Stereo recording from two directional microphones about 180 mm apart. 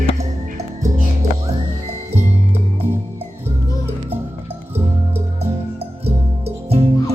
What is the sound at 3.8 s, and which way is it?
Music, 10° right (ahead or behind).